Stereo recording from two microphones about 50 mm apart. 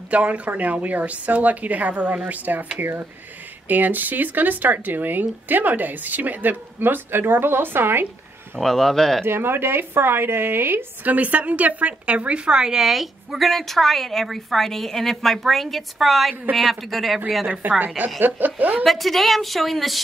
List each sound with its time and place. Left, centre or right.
0.1 s a woman's voice: right
8.5 s speech: centre
9.2 s a woman's voice: right
11.1 s a woman's voice: right; by 17.2 s centre
17.6 s speech: right
18.9 s a woman's voice: centre